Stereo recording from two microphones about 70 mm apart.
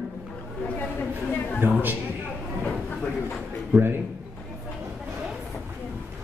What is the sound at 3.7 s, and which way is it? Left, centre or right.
Speech, centre.